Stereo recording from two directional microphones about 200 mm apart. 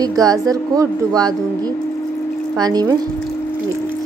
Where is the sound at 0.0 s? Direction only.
20° right (ahead or behind).